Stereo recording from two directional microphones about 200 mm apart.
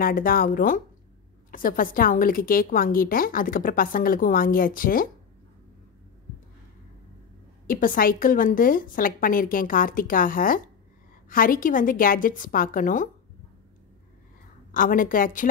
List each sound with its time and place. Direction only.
0.0 s a woman's voice: 45° left (ahead or behind)
7.6 s a woman's voice: 45° left (ahead or behind)
14.7 s a woman's voice: 45° left (ahead or behind)